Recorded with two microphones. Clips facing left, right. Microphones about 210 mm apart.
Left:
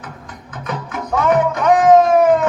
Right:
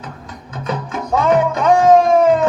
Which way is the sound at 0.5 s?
25° right (ahead or behind).